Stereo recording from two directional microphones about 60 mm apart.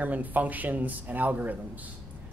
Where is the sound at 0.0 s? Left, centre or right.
Right.